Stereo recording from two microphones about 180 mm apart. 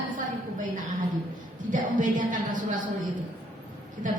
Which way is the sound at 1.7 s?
45° right (ahead or behind).